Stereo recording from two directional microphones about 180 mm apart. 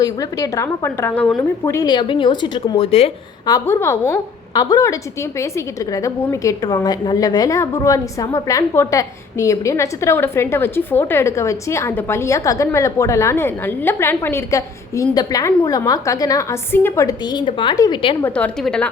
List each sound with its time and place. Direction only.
0.0 s a woman's voice: 20° left (ahead or behind)
3.4 s a woman's voice: 15° left (ahead or behind)
18.2 s a woman's voice: 5° left (ahead or behind)